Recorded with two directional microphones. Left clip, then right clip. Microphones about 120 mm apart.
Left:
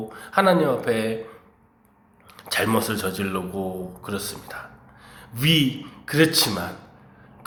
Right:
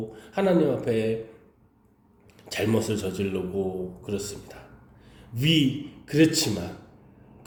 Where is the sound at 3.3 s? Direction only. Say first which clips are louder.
Even; 30° left (ahead or behind).